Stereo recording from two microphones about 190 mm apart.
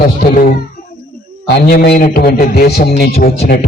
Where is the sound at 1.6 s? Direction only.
55° left (ahead or behind).